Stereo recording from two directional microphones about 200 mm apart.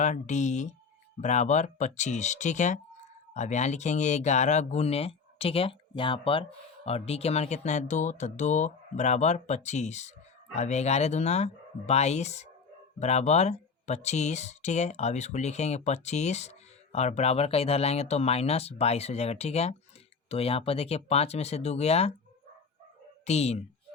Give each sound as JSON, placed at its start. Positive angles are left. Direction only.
{"t": 0.0, "sound": "speech", "side_deg": 35}
{"t": 23.2, "sound": "speech", "side_deg": 30}